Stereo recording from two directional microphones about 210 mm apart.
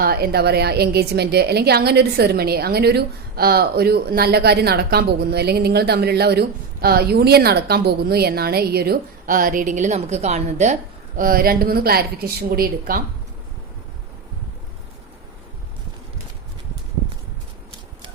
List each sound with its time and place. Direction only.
0.0 s a woman's voice: 45° right (ahead or behind)
11.2 s a woman's voice: 45° right (ahead or behind)